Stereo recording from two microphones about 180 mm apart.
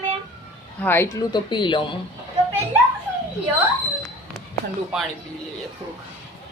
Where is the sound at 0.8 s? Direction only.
15° left (ahead or behind).